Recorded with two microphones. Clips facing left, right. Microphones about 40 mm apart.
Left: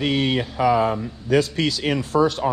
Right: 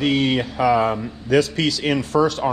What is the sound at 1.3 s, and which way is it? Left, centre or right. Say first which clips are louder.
Speech: right 2 dB; right.